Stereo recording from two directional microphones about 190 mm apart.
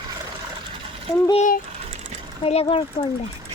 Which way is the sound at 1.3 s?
40° left (ahead or behind).